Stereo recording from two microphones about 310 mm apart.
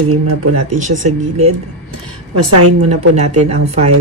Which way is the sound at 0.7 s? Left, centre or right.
Right.